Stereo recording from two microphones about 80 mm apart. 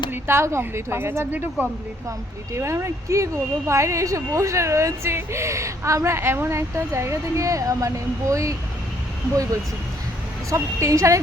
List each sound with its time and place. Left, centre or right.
0.1 s speech: right
2.0 s speech: right
10.5 s speech: right